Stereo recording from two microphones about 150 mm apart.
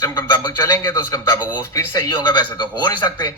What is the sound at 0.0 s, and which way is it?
A man's voice, 25° left (ahead or behind).